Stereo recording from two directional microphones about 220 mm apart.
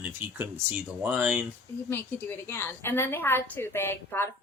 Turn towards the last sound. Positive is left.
turn(degrees=10)  # may be behind; listen again after turning